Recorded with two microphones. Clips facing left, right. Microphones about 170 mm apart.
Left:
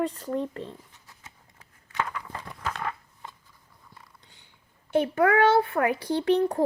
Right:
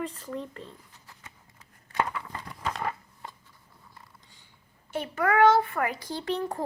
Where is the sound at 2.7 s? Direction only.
Centre (ahead or behind).